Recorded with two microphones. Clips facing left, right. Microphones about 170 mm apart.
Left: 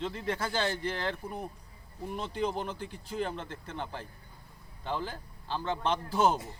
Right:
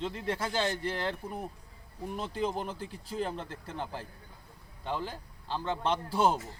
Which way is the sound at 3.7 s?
5° right (ahead or behind).